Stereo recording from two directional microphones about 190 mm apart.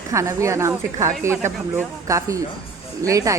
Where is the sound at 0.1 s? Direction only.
15° right (ahead or behind).